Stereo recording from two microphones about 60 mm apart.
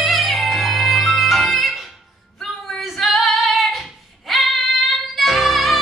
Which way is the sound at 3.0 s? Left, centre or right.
Centre.